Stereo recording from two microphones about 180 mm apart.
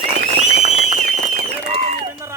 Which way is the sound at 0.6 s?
40° right (ahead or behind).